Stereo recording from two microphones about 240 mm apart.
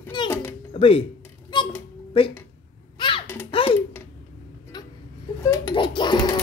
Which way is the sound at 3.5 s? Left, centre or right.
Left.